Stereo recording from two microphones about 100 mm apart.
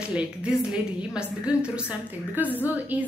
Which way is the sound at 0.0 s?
10° right (ahead or behind).